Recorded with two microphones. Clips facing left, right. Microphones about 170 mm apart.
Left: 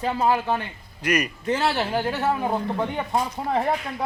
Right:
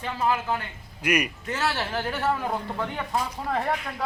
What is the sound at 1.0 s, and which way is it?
Speech, 10° right (ahead or behind).